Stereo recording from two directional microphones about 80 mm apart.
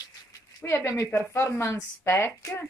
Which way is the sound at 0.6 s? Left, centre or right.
Left.